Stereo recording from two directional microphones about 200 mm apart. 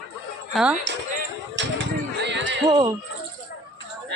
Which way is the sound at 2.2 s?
65° right (ahead or behind).